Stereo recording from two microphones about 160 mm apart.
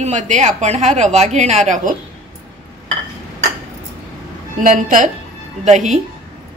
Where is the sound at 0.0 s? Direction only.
50° right (ahead or behind).